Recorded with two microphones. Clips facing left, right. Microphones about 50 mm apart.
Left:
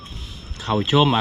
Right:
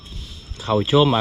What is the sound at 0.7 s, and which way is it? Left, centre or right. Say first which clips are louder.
Speech: right 1 dB; left.